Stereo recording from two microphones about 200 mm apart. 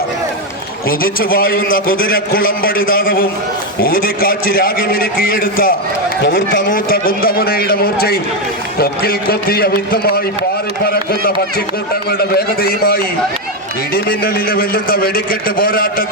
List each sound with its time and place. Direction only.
0.9 s a man's voice: 45° left (ahead or behind)
6.2 s speech: 65° left (ahead or behind)
6.7 s a man's voice: 45° left (ahead or behind)